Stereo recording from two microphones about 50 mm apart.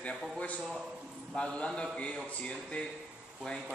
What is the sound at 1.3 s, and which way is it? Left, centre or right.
A man's voice, left.